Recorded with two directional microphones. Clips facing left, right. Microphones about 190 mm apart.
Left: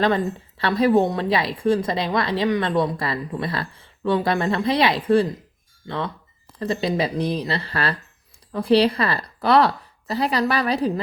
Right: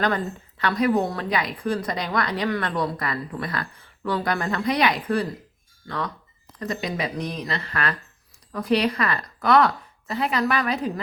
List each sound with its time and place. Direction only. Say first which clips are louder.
0.0 s a woman's voice: left 4 dB; 30° left (ahead or behind)
6.6 s a woman's voice: left 5 dB; 30° left (ahead or behind)